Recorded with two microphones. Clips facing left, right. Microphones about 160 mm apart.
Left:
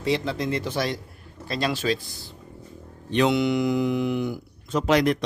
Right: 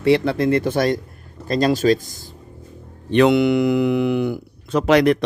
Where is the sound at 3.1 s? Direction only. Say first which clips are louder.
Right 7 dB; 60° right (ahead or behind).